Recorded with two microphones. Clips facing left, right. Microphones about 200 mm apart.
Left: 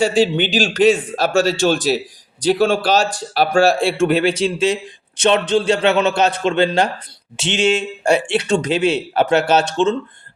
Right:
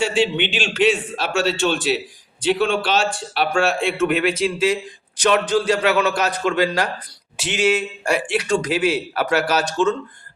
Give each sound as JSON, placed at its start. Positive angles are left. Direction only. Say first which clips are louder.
{"t": 0.0, "sound": "a man's voice", "louder": "left 4 dB", "side_deg": 40}